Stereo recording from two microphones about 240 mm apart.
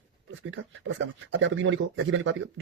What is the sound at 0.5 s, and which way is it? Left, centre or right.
Speech, right.